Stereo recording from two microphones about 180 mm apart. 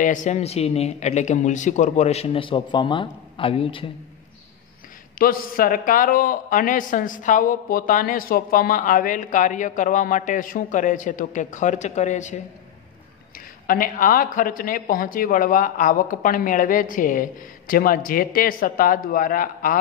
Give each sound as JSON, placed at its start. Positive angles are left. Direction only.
{"t": 0.0, "sound": "a man's voice", "side_deg": 45}
{"t": 5.2, "sound": "a man's voice", "side_deg": 50}
{"t": 13.7, "sound": "a man's voice", "side_deg": 50}